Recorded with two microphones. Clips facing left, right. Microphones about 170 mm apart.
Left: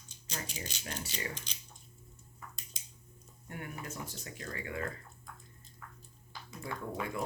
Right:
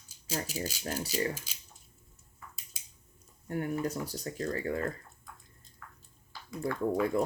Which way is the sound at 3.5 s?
35° right (ahead or behind).